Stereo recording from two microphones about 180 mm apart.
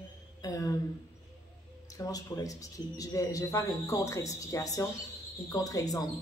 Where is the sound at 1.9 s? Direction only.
20° left (ahead or behind).